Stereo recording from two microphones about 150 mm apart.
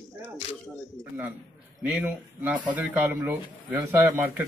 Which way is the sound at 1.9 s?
10° right (ahead or behind).